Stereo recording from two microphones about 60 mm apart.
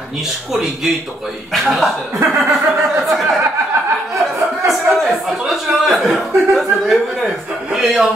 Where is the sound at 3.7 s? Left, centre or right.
Right.